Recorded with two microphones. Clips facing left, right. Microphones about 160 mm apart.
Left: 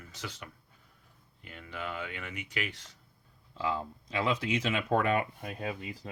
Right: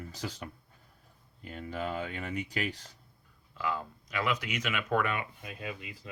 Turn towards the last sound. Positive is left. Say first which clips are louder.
# left 4 dB
turn(degrees=40)  # may be behind; listen again after turning